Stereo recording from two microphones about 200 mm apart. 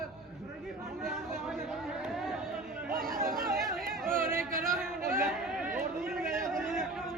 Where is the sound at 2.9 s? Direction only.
45° right (ahead or behind).